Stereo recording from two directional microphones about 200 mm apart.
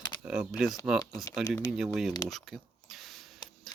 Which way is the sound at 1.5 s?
15° left (ahead or behind).